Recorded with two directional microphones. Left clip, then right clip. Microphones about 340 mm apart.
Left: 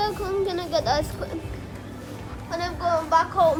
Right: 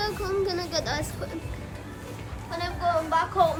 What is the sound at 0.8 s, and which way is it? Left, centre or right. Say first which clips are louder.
Speech: left 7 dB; centre.